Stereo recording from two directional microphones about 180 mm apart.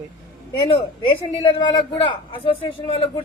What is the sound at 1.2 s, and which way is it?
A man's voice, 30° left (ahead or behind).